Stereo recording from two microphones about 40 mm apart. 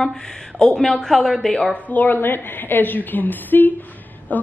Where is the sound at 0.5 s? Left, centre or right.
Centre.